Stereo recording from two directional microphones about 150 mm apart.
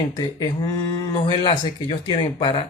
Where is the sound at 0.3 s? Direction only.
25° left (ahead or behind).